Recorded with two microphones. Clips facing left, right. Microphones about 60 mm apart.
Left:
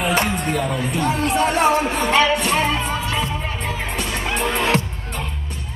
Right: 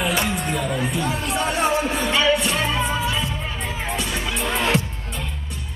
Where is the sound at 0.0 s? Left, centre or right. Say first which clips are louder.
Left 3 dB; left.